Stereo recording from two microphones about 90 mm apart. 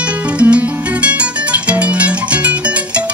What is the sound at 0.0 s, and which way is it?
Music, 15° right (ahead or behind).